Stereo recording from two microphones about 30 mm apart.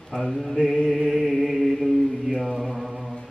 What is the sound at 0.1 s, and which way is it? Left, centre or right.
Mantra, right.